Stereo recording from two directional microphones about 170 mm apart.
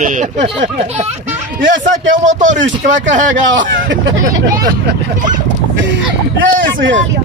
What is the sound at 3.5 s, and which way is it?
Speech, 90° right.